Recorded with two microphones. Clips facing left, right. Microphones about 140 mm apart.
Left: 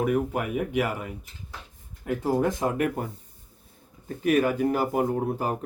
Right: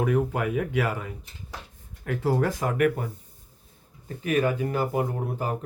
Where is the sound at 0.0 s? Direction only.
10° left (ahead or behind).